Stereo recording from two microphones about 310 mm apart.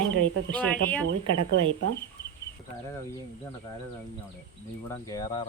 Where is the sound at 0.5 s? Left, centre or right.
Centre.